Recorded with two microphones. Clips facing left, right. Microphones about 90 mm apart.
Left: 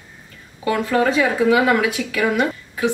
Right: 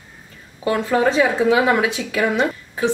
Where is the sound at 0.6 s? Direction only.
25° right (ahead or behind).